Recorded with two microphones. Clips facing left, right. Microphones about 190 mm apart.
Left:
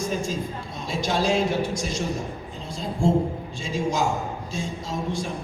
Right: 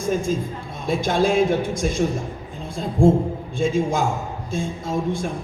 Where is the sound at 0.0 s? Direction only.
55° right (ahead or behind).